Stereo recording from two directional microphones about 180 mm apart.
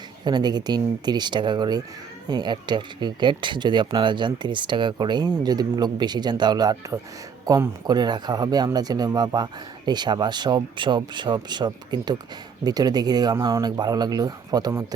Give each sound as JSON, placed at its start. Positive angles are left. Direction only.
{"t": 0.3, "sound": "speech", "side_deg": -25}